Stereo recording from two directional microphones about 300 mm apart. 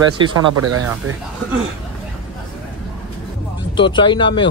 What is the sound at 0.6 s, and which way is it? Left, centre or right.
Speech, right.